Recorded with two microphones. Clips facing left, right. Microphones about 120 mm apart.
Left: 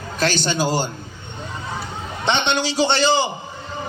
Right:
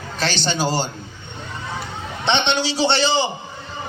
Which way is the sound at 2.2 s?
45° left (ahead or behind).